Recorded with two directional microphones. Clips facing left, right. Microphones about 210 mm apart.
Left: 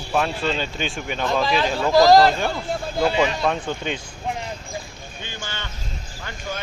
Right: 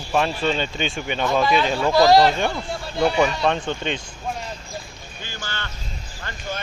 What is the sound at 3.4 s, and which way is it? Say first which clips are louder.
Speech: right 1 dB; 5° left (ahead or behind).